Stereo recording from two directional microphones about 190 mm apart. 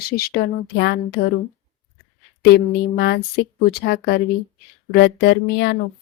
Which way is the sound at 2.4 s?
60° left (ahead or behind).